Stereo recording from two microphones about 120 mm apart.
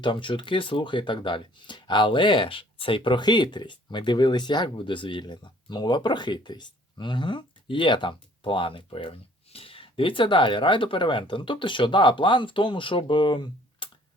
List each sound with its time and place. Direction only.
0.0 s speech: 45° left (ahead or behind)